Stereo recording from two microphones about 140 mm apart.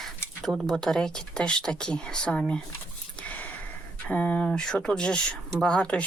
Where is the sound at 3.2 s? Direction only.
10° left (ahead or behind).